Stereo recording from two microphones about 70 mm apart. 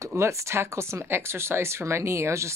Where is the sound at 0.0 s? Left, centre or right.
Right.